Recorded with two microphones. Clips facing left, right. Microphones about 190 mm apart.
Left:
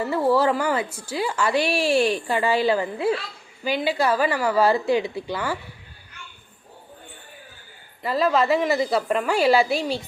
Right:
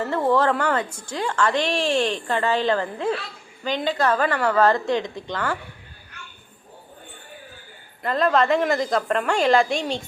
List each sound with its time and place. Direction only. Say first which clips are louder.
0.0 s a woman's voice: even; 10° left (ahead or behind)
8.0 s a woman's voice: right 1 dB; 5° left (ahead or behind)